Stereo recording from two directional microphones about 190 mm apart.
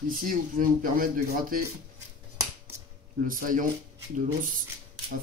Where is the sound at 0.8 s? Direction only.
50° right (ahead or behind).